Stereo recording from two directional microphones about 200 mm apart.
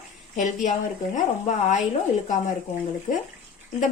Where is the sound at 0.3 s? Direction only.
35° left (ahead or behind).